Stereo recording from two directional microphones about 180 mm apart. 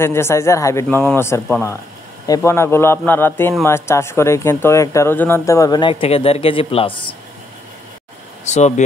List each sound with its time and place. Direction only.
0.0 s speech: 15° left (ahead or behind); by 7.2 s 30° left (ahead or behind)
8.5 s speech: 40° left (ahead or behind)